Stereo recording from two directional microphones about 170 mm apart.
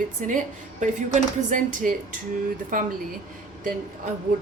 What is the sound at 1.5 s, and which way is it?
A woman's voice, 50° right (ahead or behind).